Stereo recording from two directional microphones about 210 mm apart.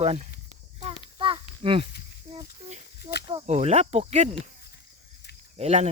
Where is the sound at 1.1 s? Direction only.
25° right (ahead or behind).